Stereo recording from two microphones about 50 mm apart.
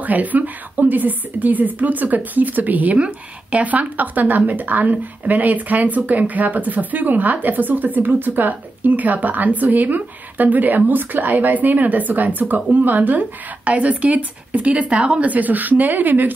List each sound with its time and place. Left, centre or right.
0.0 s speech: right